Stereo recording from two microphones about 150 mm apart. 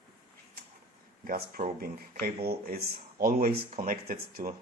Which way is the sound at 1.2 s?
75° right (ahead or behind).